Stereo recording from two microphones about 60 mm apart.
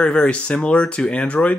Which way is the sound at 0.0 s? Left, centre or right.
Centre.